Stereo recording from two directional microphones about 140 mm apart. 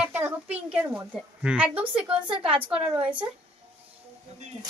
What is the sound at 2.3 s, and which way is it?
Speech, 40° right (ahead or behind).